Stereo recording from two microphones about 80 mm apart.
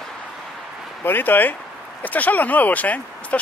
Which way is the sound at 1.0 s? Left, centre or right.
Left.